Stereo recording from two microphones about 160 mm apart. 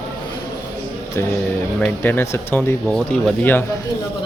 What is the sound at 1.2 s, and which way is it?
Speech, 15° left (ahead or behind).